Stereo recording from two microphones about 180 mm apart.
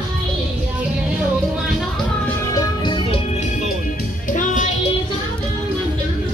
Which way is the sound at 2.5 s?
20° left (ahead or behind).